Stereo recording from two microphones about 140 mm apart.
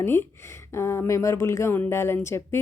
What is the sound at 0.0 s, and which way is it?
Speech, 15° left (ahead or behind).